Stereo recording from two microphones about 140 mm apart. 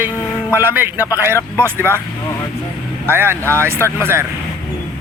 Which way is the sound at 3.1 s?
15° right (ahead or behind).